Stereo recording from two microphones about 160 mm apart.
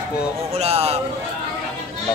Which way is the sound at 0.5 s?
40° right (ahead or behind).